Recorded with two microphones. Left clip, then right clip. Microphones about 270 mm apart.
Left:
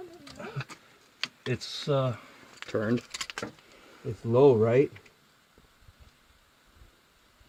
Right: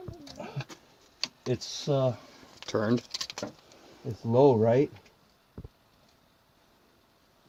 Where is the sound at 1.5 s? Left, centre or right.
Left.